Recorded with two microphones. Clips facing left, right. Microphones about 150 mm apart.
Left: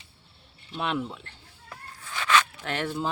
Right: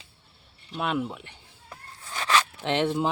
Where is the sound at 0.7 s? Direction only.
5° right (ahead or behind).